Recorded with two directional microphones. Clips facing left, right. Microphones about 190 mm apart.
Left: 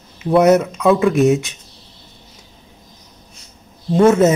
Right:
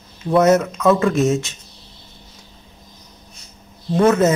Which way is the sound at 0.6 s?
10° left (ahead or behind).